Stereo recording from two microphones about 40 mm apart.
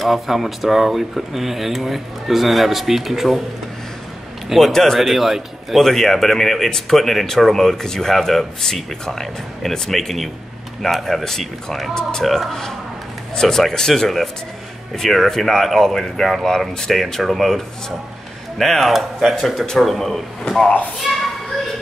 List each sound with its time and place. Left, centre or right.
0.0 s speech: centre
4.5 s speech: centre
5.9 s speech: centre
11.2 s speech: centre
12.3 s a child's voice: centre